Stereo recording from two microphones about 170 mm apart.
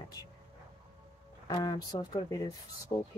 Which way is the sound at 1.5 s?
25° left (ahead or behind).